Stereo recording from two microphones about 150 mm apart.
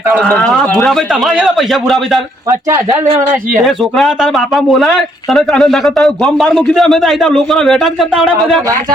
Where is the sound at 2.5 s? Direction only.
20° right (ahead or behind).